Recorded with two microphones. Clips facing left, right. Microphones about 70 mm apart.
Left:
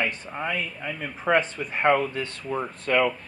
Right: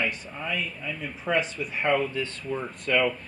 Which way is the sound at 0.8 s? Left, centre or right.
Left.